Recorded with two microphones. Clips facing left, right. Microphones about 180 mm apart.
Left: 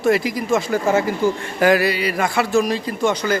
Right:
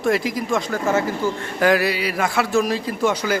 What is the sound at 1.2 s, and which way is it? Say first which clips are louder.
Speech: left 4 dB; 15° left (ahead or behind).